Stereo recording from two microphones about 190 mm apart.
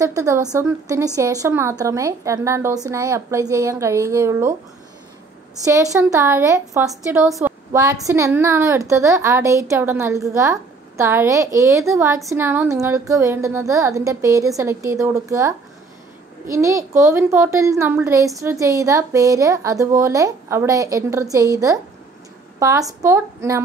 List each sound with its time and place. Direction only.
0.0 s a woman's voice: 15° right (ahead or behind)
5.6 s a woman's voice: 15° right (ahead or behind)
7.1 s a woman's voice: 5° right (ahead or behind)